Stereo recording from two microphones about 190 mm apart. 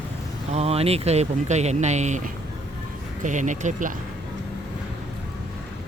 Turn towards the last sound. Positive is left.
turn(degrees=-40)  # may be behind; listen again after turning